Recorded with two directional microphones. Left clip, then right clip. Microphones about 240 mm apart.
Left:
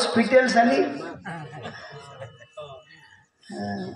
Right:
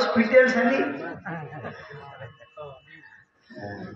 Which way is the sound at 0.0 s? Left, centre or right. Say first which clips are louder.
Right 1 dB; right.